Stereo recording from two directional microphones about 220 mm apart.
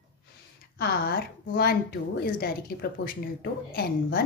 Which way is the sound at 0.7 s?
45° left (ahead or behind).